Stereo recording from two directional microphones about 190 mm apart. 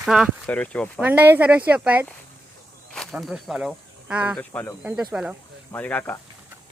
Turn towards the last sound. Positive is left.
turn(degrees=10)  # may be behind; listen again after turning